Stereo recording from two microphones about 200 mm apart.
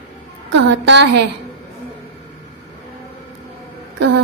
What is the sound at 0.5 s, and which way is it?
Speech, 60° right (ahead or behind).